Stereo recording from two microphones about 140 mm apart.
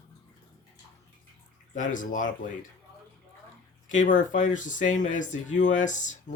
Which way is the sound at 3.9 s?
65° left (ahead or behind).